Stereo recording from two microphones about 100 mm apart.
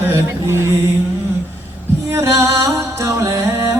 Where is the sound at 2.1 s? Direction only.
30° right (ahead or behind).